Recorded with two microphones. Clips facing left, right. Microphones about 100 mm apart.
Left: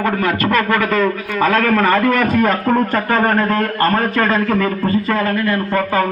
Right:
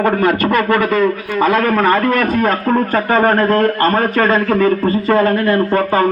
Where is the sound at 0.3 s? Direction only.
20° right (ahead or behind).